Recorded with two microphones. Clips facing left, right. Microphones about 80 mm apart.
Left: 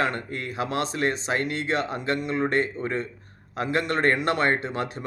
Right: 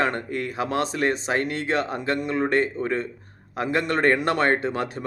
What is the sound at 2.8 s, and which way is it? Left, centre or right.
Speech, right.